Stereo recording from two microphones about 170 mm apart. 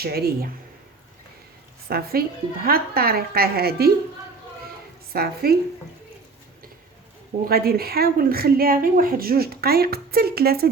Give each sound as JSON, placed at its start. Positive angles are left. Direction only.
{"t": 0.0, "sound": "a woman's voice", "side_deg": -65}
{"t": 1.9, "sound": "a woman's voice", "side_deg": -60}
{"t": 5.1, "sound": "a woman's voice", "side_deg": -65}
{"t": 7.4, "sound": "a woman's voice", "side_deg": -60}